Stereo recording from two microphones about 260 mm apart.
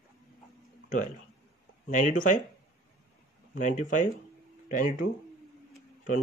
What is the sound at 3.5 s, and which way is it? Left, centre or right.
Speech, left.